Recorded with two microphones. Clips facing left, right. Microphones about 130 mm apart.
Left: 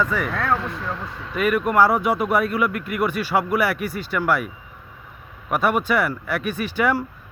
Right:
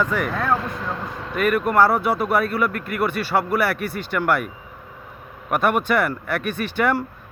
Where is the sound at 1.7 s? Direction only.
15° left (ahead or behind).